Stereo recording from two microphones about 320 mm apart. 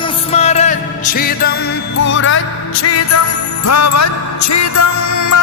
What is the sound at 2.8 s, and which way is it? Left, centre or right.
Music, left.